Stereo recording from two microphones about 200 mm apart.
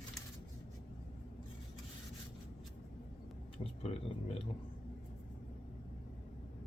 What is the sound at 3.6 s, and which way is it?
Speech, 30° left (ahead or behind).